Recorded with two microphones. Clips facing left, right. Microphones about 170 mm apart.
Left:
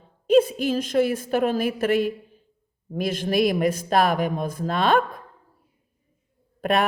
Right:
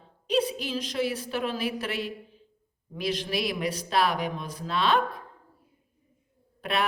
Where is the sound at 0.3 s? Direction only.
50° left (ahead or behind).